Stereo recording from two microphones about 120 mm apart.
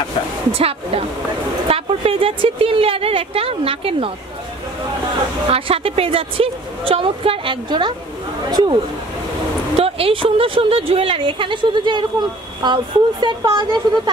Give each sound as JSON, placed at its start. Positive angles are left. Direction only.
{"t": 0.6, "sound": "a woman's voice", "side_deg": -55}
{"t": 5.5, "sound": "a woman's voice", "side_deg": -55}
{"t": 9.8, "sound": "a woman's voice", "side_deg": -50}